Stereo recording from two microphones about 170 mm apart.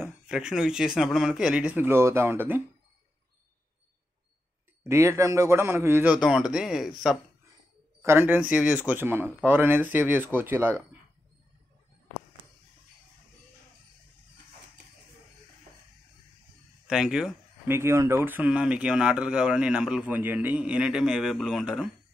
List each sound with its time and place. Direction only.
0.0 s speech: 5° right (ahead or behind)
4.8 s speech: 15° right (ahead or behind)
8.0 s speech: 15° right (ahead or behind)
16.8 s speech: 5° right (ahead or behind)
17.6 s speech: 15° right (ahead or behind)